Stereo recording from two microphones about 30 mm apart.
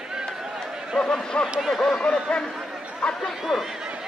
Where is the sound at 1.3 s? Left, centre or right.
Left.